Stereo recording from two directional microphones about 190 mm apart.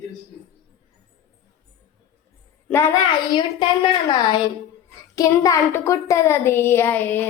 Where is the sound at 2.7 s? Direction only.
15° left (ahead or behind).